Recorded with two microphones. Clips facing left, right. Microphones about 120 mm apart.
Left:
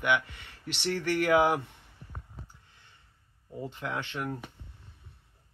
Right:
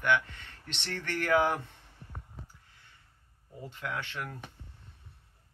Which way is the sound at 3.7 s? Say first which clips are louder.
Even; 20° left (ahead or behind).